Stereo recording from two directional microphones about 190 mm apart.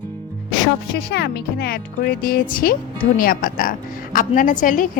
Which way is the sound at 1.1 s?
60° left (ahead or behind).